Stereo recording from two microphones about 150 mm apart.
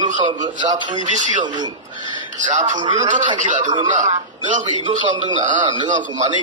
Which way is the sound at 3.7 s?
30° right (ahead or behind).